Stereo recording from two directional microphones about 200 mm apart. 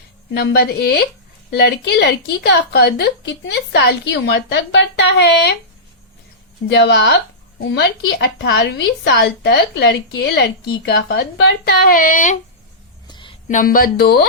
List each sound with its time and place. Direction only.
0.3 s a woman's voice: 50° left (ahead or behind)
6.7 s a woman's voice: 55° left (ahead or behind); by 12.4 s 40° left (ahead or behind)
13.1 s a sound: 25° left (ahead or behind)
13.5 s speech: 45° left (ahead or behind)